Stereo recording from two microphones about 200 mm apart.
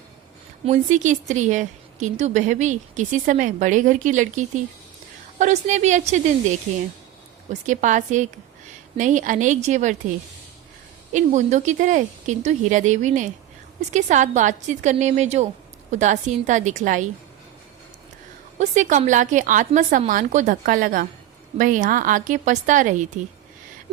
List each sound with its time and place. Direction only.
0.6 s a woman's voice: 35° right (ahead or behind)
7.7 s a woman's voice: 40° right (ahead or behind)
11.1 s a woman's voice: 35° right (ahead or behind)
18.6 s a woman's voice: 35° right (ahead or behind)